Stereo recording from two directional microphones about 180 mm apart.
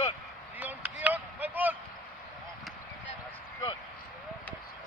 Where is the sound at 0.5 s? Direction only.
10° right (ahead or behind).